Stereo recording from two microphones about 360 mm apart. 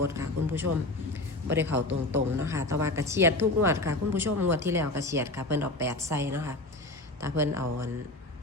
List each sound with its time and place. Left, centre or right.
0.1 s speech: centre
1.7 s a man's voice: right
2.4 s speech: centre